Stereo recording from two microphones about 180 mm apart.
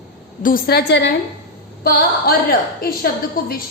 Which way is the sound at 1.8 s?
55° left (ahead or behind).